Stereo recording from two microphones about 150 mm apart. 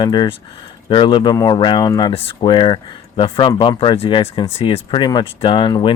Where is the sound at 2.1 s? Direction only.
40° left (ahead or behind).